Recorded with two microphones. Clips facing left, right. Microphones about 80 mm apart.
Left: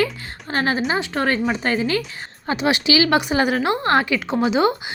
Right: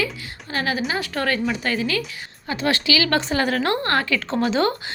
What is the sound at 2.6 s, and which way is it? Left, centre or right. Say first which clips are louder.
A woman's voice: left 3 dB; centre.